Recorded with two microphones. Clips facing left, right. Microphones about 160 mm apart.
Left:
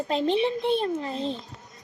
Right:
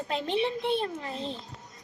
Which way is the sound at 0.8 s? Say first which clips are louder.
Left 5 dB; 35° left (ahead or behind).